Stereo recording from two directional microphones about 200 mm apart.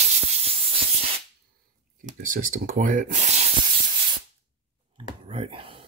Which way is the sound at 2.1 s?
45° right (ahead or behind).